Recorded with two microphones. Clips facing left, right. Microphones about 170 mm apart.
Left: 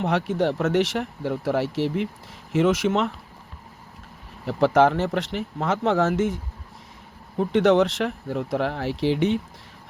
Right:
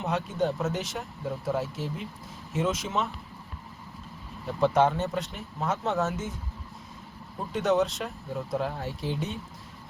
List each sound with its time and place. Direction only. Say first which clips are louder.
0.0 s speech: left 5 dB; 80° left
4.4 s speech: left 5 dB; 90° left
7.3 s speech: left 7 dB; 80° left